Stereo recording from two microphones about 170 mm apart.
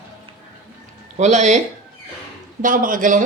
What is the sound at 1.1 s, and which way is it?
Speech, 45° right (ahead or behind).